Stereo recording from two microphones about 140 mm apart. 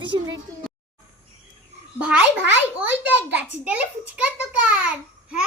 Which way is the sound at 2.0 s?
10° right (ahead or behind).